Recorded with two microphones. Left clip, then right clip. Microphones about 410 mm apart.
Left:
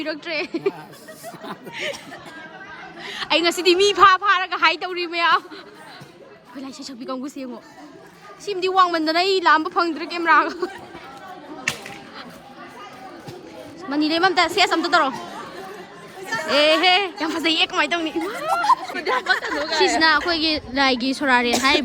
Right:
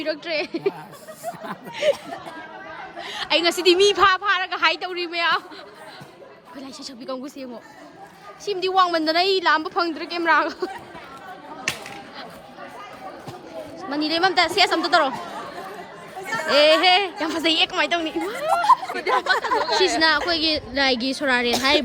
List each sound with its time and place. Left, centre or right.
0.0 s speech: centre
3.0 s speech: centre
6.6 s speech: centre
8.4 s speech: centre
13.9 s speech: centre
16.2 s speech: centre
19.1 s speech: centre
20.0 s speech: centre